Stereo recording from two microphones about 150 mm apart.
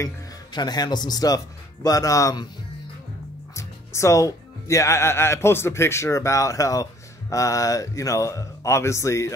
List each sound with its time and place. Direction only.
0.0 s speech: 30° left (ahead or behind)
3.5 s speech: 20° left (ahead or behind)